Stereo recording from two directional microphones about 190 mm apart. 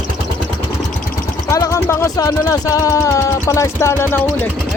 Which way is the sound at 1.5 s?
15° left (ahead or behind).